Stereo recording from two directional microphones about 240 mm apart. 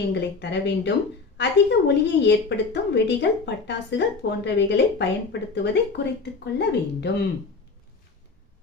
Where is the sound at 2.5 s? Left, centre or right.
Left.